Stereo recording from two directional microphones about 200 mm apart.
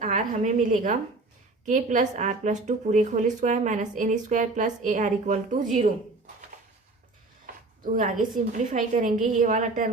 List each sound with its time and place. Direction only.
0.0 s a woman's voice: 40° right (ahead or behind)
8.5 s a woman's voice: 40° right (ahead or behind)